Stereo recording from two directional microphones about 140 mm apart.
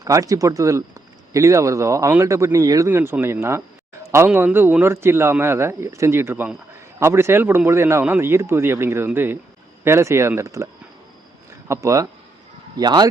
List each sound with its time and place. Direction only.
0.0 s a man's voice: 25° right (ahead or behind)
11.7 s a man's voice: 25° right (ahead or behind)